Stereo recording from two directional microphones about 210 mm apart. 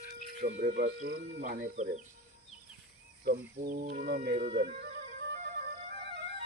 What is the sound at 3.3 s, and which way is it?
Speech, 45° right (ahead or behind).